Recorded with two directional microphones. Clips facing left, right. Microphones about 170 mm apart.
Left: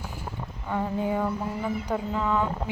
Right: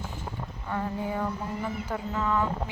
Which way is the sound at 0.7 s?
15° left (ahead or behind).